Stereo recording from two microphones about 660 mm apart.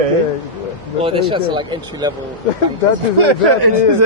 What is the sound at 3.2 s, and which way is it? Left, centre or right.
Speech, right.